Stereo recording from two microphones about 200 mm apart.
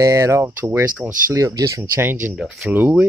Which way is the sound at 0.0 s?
15° right (ahead or behind).